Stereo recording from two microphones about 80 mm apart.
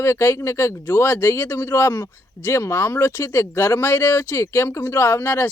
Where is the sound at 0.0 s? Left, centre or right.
Left.